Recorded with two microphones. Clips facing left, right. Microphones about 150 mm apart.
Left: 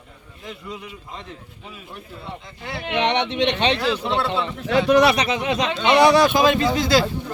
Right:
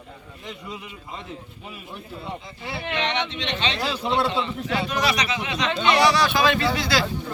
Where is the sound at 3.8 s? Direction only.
15° right (ahead or behind).